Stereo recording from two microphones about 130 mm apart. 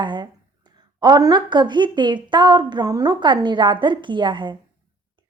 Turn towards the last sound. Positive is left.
turn(degrees=-40)  # may be behind; listen again after turning